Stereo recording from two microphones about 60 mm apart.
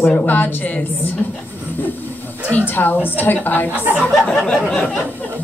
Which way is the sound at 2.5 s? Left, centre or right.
Left.